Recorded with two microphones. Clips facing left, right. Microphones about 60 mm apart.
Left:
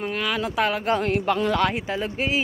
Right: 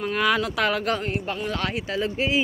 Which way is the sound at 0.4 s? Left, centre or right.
Centre.